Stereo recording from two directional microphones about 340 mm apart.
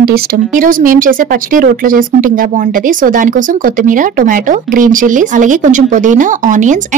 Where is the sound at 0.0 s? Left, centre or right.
Right.